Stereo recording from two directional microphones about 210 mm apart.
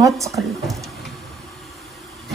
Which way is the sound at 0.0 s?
15° right (ahead or behind).